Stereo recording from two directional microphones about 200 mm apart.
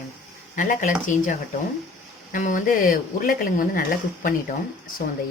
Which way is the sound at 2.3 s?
40° left (ahead or behind).